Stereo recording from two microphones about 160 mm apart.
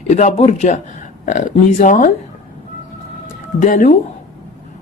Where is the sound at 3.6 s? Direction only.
55° left (ahead or behind).